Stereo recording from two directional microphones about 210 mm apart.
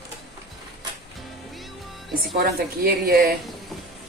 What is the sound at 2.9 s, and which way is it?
Speech, 45° right (ahead or behind).